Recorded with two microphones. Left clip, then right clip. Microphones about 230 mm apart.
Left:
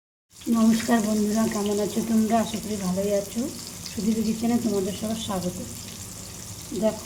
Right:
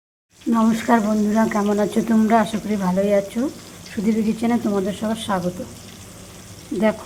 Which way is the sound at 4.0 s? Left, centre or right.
Right.